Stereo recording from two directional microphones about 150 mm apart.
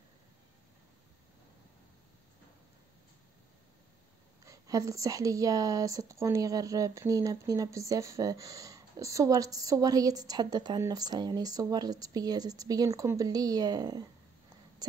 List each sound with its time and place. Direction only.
4.5 s speech: 25° right (ahead or behind)